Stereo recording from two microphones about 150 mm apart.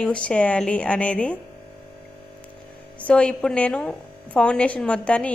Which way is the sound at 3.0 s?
5° left (ahead or behind).